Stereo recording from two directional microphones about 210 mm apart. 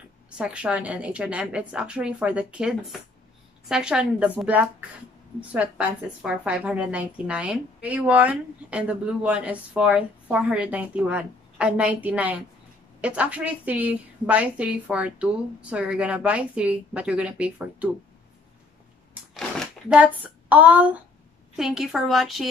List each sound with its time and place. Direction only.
0.4 s a woman's voice: 5° right (ahead or behind)
19.3 s shuffling cards: centre (ahead or behind)
21.5 s a woman's voice: centre (ahead or behind)